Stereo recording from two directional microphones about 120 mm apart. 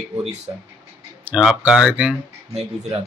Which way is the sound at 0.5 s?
35° right (ahead or behind).